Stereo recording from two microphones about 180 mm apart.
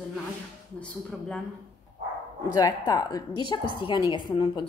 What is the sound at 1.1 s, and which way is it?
Speech, centre (ahead or behind).